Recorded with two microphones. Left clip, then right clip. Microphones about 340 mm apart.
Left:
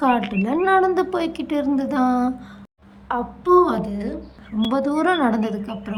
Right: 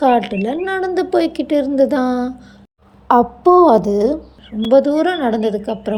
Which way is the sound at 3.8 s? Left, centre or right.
Right.